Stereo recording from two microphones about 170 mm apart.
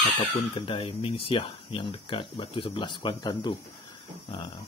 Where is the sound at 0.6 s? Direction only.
30° left (ahead or behind).